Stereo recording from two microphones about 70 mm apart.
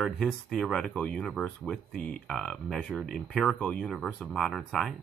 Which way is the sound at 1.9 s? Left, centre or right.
Centre.